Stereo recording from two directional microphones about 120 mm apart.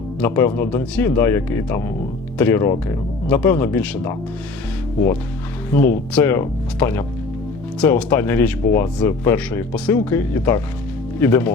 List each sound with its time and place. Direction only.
0.2 s speech: 15° left (ahead or behind)
5.7 s speech: 20° left (ahead or behind)